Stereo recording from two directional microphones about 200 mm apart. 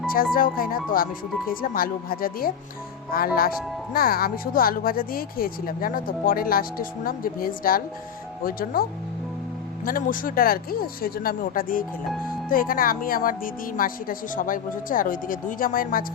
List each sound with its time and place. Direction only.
0.3 s speech: 45° left (ahead or behind)